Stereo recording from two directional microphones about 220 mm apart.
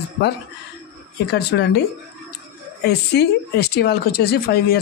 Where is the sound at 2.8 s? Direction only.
50° left (ahead or behind).